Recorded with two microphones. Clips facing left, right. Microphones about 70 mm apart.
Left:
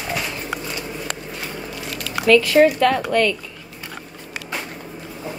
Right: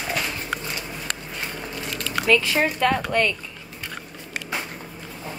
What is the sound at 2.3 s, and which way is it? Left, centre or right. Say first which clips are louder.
Speech: left 8 dB; right.